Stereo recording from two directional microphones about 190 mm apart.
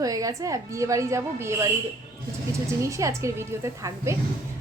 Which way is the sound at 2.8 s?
15° right (ahead or behind).